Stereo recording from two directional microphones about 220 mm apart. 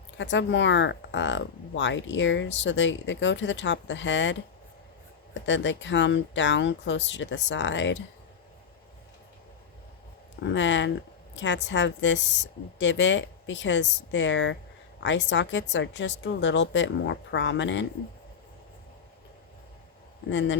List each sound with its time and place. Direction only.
0.2 s speech: 55° left (ahead or behind)
10.4 s speech: 55° left (ahead or behind)